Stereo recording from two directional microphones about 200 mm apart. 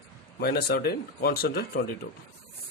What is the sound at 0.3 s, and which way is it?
Speech, 50° left (ahead or behind).